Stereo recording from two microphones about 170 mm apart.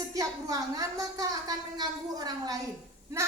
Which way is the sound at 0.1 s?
20° right (ahead or behind).